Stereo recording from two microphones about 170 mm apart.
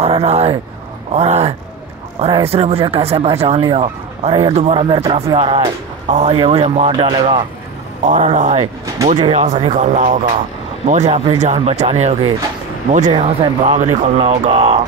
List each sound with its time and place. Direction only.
0.0 s speech: 40° right (ahead or behind)
8.1 s speech: 45° right (ahead or behind)